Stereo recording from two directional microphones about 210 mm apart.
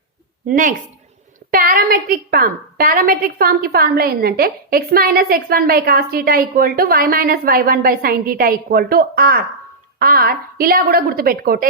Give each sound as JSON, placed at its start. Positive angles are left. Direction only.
{"t": 0.4, "sound": "a woman's voice", "side_deg": -40}